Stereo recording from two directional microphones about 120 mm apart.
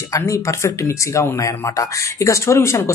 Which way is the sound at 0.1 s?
25° left (ahead or behind).